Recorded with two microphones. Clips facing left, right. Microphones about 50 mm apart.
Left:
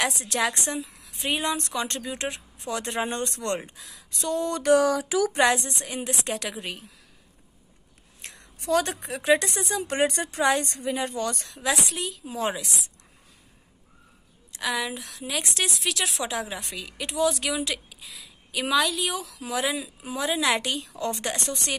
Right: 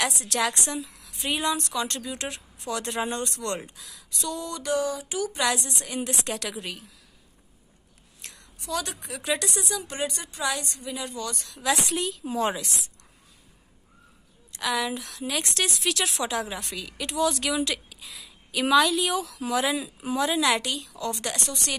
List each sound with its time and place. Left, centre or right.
0.2 s a woman's voice: left
1.6 s speech: left
4.2 s a sound: left
4.7 s speech: left
5.4 s a woman's voice: left
5.9 s speech: centre
8.2 s a sound: left
8.5 s a woman's voice: left
9.8 s a woman's voice: left
11.5 s speech: centre
12.0 s speech: centre
14.6 s a woman's voice: centre
20.6 s speech: left